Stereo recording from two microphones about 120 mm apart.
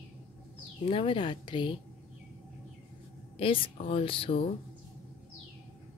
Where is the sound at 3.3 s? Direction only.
50° left (ahead or behind).